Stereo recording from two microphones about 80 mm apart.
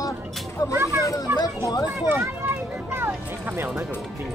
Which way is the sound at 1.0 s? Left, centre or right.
Left.